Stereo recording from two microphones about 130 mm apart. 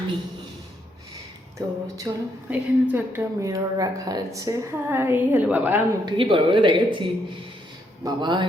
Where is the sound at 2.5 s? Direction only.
10° right (ahead or behind).